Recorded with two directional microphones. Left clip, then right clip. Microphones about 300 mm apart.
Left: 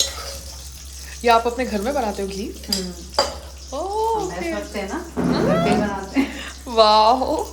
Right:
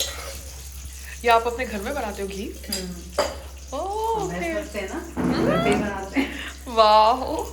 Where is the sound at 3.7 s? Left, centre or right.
Centre.